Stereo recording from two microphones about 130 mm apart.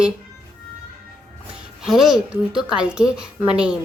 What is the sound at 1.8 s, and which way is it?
A woman's voice, centre (ahead or behind).